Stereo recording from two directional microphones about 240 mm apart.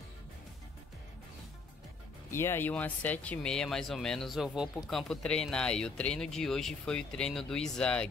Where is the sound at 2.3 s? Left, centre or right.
Centre.